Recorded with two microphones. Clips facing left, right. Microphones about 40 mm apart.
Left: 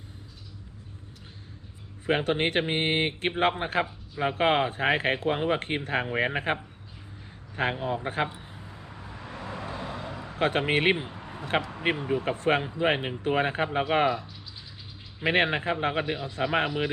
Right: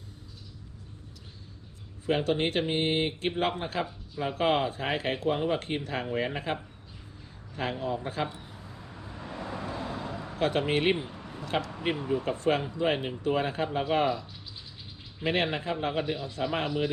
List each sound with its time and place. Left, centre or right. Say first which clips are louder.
2.0 s speech: left 2 dB; left
7.5 s vehicle: left 3 dB; left; by 10.3 s centre
10.3 s speech: left 2 dB; left
10.9 s speech: left 1 dB; centre
12.2 s speech: left 3 dB; left
15.3 s speech: left 4 dB; left